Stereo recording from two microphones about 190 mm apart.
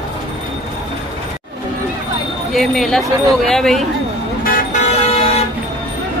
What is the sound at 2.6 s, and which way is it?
Speech, centre (ahead or behind).